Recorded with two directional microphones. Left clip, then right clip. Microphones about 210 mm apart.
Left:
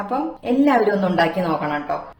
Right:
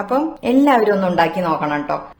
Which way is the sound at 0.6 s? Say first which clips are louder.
Right 2 dB; 35° right (ahead or behind).